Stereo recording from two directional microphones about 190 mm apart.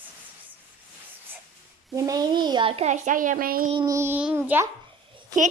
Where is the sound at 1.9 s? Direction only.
20° right (ahead or behind); by 3.7 s 50° right (ahead or behind).